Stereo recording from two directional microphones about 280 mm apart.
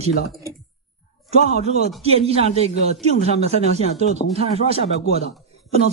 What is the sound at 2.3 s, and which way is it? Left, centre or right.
Speech, right.